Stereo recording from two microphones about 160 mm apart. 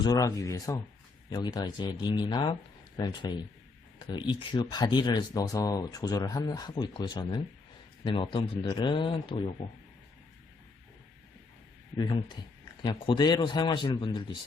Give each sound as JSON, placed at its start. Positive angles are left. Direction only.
{"t": 0.0, "sound": "speech", "side_deg": 25}
{"t": 11.9, "sound": "speech", "side_deg": 25}